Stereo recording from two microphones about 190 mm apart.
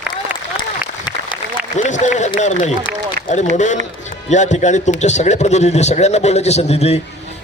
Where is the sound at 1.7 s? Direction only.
40° left (ahead or behind).